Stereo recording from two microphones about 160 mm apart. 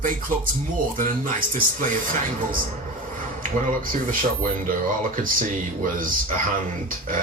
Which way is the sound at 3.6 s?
55° right (ahead or behind).